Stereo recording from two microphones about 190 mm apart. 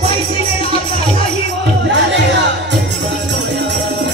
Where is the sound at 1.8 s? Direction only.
70° right (ahead or behind).